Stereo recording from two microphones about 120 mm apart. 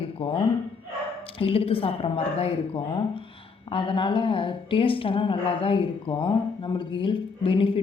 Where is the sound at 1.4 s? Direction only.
50° left (ahead or behind).